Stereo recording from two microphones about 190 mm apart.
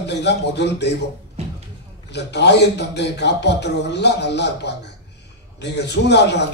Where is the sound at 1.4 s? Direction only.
35° right (ahead or behind).